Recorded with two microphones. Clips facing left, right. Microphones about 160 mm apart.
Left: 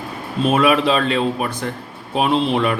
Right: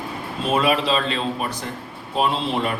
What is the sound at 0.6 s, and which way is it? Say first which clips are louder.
A man's voice: left 3 dB; 55° left (ahead or behind).